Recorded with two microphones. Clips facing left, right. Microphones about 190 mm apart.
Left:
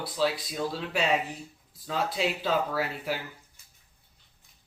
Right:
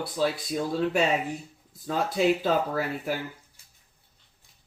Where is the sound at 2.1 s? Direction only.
50° right (ahead or behind).